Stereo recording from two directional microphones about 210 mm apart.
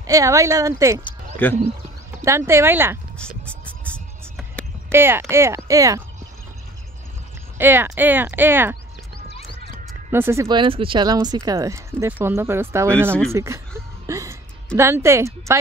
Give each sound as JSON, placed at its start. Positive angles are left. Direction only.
{"t": 0.0, "sound": "speech", "side_deg": -15}
{"t": 1.4, "sound": "speech", "side_deg": 10}
{"t": 2.2, "sound": "speech", "side_deg": -15}
{"t": 3.2, "sound": "music", "side_deg": 5}
{"t": 4.9, "sound": "speech", "side_deg": -10}
{"t": 7.5, "sound": "speech", "side_deg": -10}
{"t": 10.1, "sound": "speech", "side_deg": -10}
{"t": 13.3, "sound": "a sound", "side_deg": -15}
{"t": 14.8, "sound": "speech", "side_deg": -15}